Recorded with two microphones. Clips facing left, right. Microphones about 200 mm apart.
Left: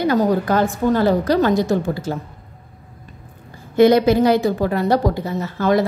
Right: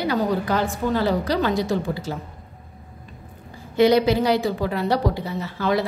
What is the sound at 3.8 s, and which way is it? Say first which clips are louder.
A woman's voice: left 4 dB; 50° left (ahead or behind).